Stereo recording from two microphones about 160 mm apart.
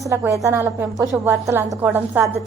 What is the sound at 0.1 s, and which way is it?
A woman's voice, 20° right (ahead or behind).